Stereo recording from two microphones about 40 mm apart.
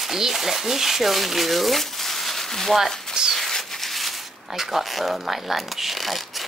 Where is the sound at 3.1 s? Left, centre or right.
Centre.